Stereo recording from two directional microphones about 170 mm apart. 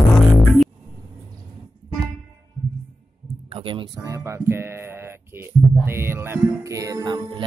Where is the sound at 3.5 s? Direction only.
30° right (ahead or behind).